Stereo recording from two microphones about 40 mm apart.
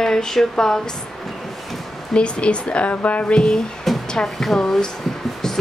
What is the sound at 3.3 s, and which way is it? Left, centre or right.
Speech, centre.